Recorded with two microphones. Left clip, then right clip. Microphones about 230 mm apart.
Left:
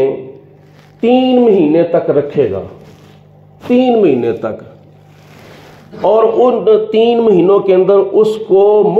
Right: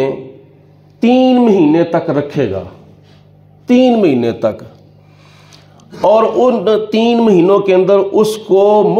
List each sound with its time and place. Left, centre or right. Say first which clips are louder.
1.0 s a man's voice: left 1 dB; right
3.7 s speech: even; right
5.9 s a man's voice: even; right
7.3 s speech: even; right